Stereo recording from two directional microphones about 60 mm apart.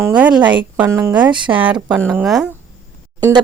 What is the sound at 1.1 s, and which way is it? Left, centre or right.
Speech, right.